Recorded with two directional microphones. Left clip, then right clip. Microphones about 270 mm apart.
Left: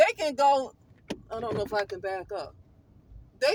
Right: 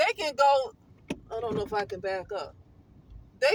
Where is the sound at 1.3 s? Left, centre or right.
Left.